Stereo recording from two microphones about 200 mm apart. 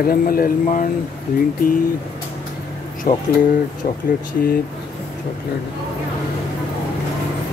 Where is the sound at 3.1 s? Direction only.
40° left (ahead or behind).